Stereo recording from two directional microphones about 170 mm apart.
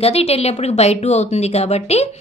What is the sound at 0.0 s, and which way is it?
A woman's voice, 35° left (ahead or behind).